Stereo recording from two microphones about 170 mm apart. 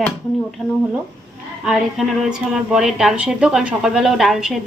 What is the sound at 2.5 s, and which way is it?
A woman's voice, 5° right (ahead or behind).